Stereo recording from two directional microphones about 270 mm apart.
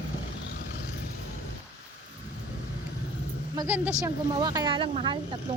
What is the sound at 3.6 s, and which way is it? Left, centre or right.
A woman's voice, centre.